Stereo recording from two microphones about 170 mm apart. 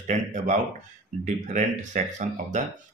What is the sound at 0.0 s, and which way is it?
Speech, 45° right (ahead or behind).